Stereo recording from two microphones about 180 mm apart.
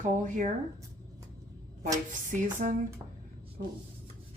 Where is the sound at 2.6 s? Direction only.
50° right (ahead or behind).